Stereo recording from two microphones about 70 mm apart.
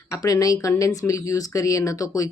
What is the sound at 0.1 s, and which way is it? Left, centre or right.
Speech, left.